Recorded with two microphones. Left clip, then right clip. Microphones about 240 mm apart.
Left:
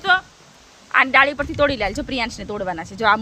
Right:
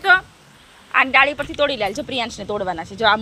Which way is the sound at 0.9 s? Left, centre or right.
Centre.